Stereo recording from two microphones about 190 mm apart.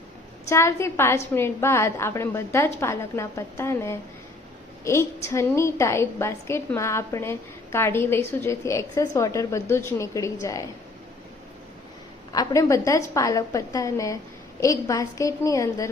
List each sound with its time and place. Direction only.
0.4 s a woman's voice: 15° left (ahead or behind)
12.3 s a woman's voice: 20° left (ahead or behind)